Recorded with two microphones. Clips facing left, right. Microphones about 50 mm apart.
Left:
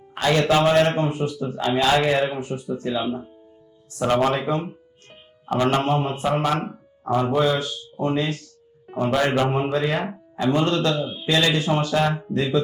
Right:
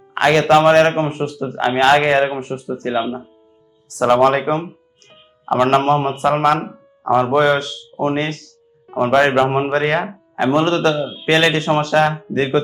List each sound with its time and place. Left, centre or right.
0.1 s speech: right
3.8 s speech: right
5.6 s speech: right